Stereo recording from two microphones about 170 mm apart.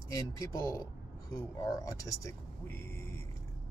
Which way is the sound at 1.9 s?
15° left (ahead or behind).